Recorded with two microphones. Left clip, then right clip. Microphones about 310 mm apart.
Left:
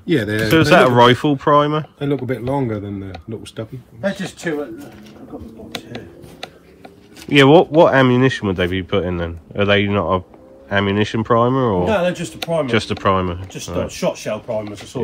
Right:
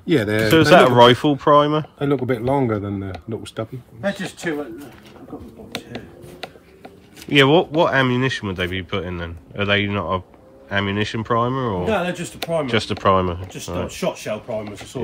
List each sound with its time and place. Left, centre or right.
0.0 s speech: centre
0.5 s speech: centre
2.0 s speech: right
5.7 s speech: centre
13.8 s speech: centre